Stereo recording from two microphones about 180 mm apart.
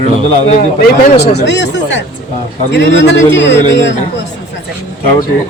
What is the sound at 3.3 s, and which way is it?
Speech, 75° left (ahead or behind).